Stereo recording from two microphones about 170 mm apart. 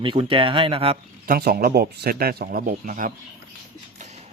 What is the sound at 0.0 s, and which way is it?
Speech, 30° right (ahead or behind).